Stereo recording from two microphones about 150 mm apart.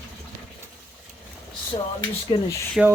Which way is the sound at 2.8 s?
Centre (ahead or behind).